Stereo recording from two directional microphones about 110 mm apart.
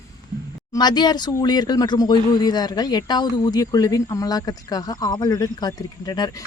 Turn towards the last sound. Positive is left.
turn(degrees=35)  # may be behind; listen again after turning